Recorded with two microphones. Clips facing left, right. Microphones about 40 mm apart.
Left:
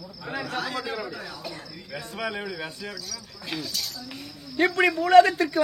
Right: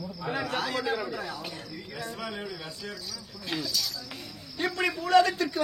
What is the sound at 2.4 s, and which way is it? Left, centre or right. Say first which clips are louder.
Speech: left 4 dB; left.